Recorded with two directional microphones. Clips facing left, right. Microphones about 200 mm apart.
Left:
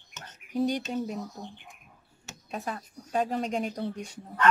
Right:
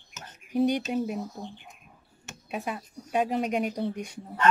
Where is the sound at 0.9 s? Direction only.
10° right (ahead or behind).